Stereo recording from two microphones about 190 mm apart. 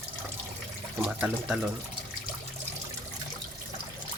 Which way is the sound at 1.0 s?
5° right (ahead or behind).